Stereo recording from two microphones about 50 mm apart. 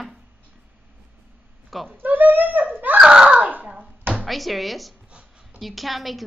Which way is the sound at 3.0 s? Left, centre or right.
Centre.